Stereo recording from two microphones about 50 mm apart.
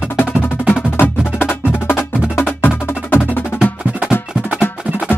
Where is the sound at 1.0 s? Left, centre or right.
Left.